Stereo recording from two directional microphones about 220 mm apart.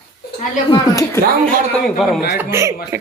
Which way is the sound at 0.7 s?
15° left (ahead or behind).